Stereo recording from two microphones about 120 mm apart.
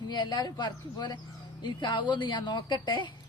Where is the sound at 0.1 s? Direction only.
35° left (ahead or behind).